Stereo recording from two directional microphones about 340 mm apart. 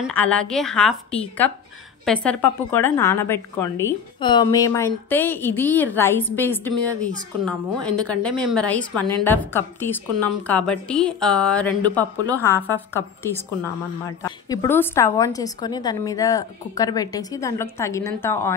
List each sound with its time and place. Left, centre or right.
0.0 s a woman's voice: centre